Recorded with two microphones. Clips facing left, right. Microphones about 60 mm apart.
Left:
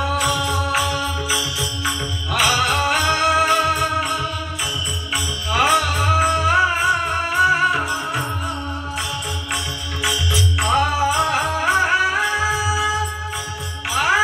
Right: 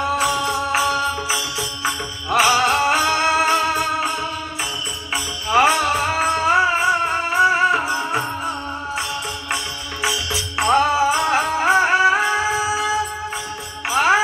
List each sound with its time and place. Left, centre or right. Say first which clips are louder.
0.0 s music: right 1 dB; right
10.0 s music: left 1 dB; centre
13.8 s music: right 2 dB; centre